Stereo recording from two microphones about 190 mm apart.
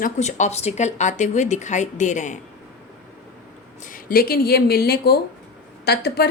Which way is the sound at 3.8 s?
50° left (ahead or behind).